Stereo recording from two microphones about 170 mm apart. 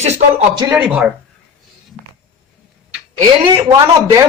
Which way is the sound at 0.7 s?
5° right (ahead or behind).